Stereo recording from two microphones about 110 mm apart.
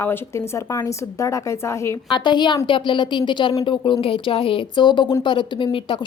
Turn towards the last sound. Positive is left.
turn(degrees=50)  # may be behind; listen again after turning